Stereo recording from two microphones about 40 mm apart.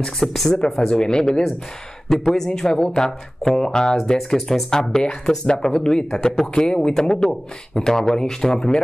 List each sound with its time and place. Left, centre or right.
0.2 s speech: centre; by 1.4 s left
2.0 s speech: centre